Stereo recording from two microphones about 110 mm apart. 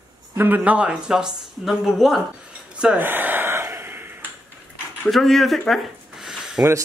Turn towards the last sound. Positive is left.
turn(degrees=-5)  # may be behind; listen again after turning